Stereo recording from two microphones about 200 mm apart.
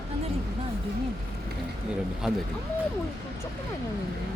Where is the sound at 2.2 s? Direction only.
Centre (ahead or behind).